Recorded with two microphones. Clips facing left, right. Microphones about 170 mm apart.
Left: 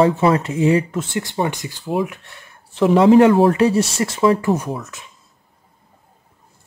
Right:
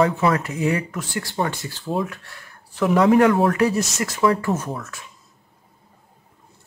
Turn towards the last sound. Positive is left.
turn(degrees=20)  # may be behind; listen again after turning